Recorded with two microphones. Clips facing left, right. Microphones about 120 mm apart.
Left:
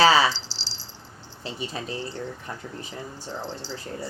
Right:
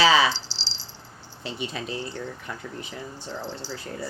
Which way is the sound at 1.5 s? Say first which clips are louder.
Even; 35° left (ahead or behind).